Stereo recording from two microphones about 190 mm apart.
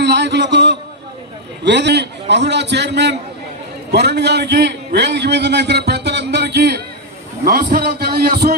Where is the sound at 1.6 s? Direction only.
65° right (ahead or behind).